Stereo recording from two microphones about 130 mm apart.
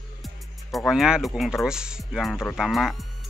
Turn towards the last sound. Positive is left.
turn(degrees=0)  # may be behind; listen again after turning